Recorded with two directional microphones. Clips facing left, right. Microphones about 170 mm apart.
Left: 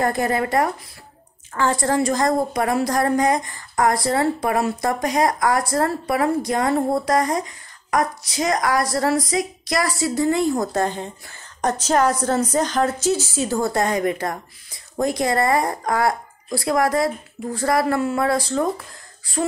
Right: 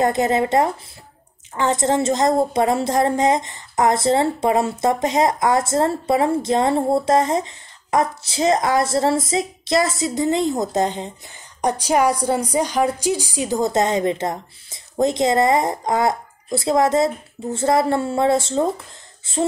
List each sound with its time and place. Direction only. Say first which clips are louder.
0.0 s a woman's voice: right 3 dB; 20° right (ahead or behind)